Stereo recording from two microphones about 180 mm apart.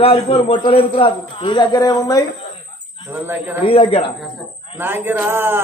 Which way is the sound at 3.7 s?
30° left (ahead or behind).